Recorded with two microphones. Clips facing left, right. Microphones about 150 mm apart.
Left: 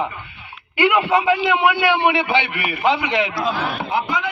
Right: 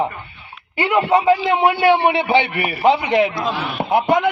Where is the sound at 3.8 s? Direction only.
55° right (ahead or behind).